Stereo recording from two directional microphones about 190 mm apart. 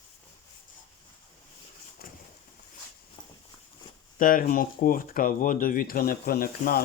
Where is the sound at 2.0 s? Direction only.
55° left (ahead or behind).